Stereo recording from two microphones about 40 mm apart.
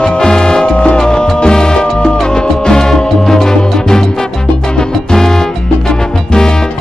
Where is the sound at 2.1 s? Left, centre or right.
Centre.